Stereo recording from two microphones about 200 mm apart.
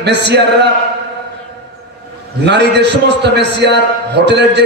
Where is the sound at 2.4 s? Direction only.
55° right (ahead or behind).